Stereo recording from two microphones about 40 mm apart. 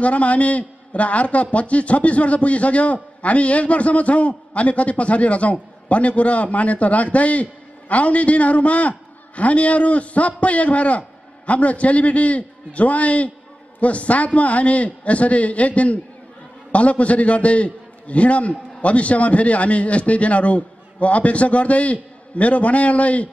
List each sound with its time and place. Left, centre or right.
0.0 s a man's voice: left